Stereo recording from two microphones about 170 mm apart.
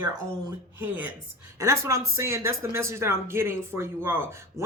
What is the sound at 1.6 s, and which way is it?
Speech, 15° right (ahead or behind).